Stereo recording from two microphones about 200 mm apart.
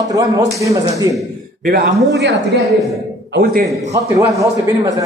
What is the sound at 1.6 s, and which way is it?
A man's voice, 50° right (ahead or behind).